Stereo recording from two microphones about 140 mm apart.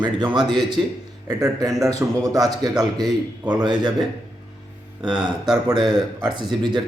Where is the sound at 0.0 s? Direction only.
35° right (ahead or behind).